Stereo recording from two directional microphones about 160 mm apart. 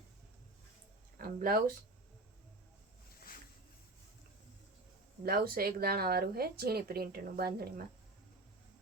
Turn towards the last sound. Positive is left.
turn(degrees=-70)  # may be behind; listen again after turning